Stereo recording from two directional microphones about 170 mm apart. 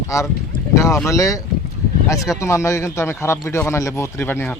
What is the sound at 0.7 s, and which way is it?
Speech, 20° left (ahead or behind).